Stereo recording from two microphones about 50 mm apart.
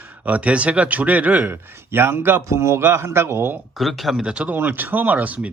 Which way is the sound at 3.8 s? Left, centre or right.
Centre.